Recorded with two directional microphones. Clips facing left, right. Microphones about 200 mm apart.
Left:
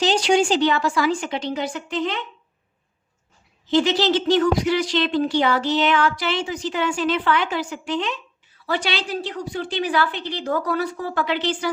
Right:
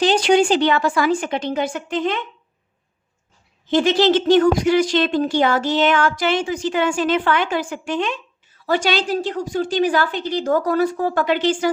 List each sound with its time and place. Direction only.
0.0 s a woman's voice: 55° right (ahead or behind)
3.7 s a woman's voice: 50° right (ahead or behind)